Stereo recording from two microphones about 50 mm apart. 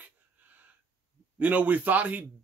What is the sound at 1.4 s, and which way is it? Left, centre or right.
Speech, right.